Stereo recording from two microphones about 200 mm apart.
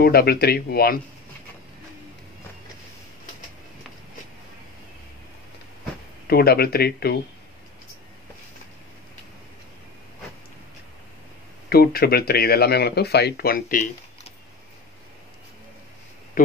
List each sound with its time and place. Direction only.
0.0 s speech: 50° left (ahead or behind)
6.2 s speech: 50° left (ahead or behind)
11.7 s speech: 50° left (ahead or behind)
16.4 s speech: 40° left (ahead or behind)